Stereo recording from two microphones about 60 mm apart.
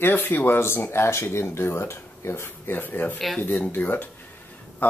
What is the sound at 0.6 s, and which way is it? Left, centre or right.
Speech, left.